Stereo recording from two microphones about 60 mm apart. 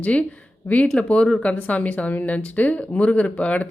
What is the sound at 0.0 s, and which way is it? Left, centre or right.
Speech, left.